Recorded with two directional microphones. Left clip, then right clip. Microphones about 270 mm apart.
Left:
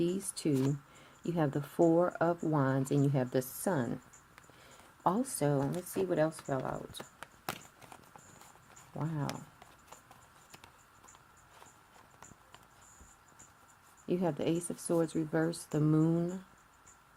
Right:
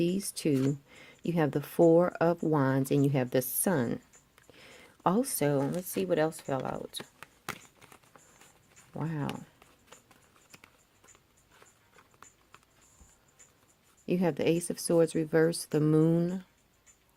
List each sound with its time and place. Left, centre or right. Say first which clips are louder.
0.0 s speech: right 3 dB; right
5.0 s speech: right 3 dB; right
6.9 s speech: right 4 dB; centre
9.0 s speech: right 3 dB; right
14.1 s speech: right 5 dB; right